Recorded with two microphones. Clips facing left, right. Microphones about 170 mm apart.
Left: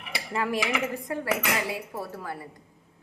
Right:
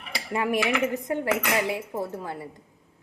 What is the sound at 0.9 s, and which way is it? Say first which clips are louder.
A woman's voice: right 3 dB; 20° right (ahead or behind).